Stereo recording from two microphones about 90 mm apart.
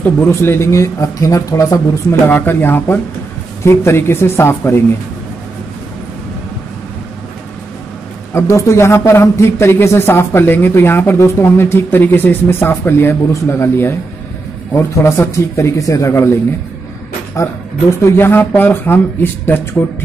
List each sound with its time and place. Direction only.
0.3 s a man's voice: 30° left (ahead or behind)
2.0 s speech: 20° left (ahead or behind)
8.3 s a man's voice: 30° left (ahead or behind)
17.4 s a man's voice: 35° left (ahead or behind)